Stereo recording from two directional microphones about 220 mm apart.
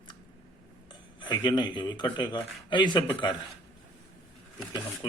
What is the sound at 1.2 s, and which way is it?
Speech, 20° left (ahead or behind).